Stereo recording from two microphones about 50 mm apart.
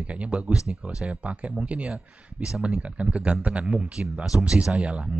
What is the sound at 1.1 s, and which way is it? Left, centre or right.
A man's voice, right.